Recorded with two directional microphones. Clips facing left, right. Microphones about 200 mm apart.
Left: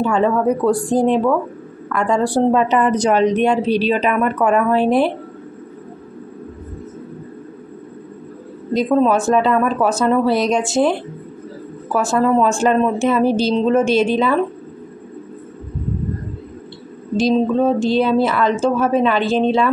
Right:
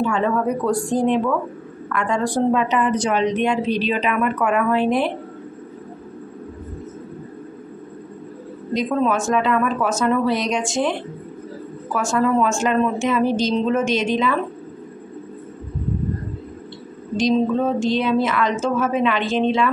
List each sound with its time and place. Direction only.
0.0 s a woman's voice: 35° left (ahead or behind)
8.7 s a woman's voice: 35° left (ahead or behind)
17.3 s a woman's voice: 35° left (ahead or behind)